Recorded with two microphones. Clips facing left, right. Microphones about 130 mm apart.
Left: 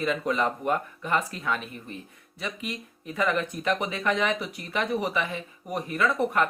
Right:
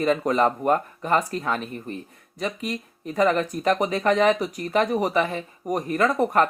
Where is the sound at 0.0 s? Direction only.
40° right (ahead or behind).